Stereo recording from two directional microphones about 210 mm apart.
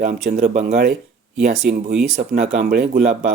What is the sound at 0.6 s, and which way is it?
Speech, 45° right (ahead or behind).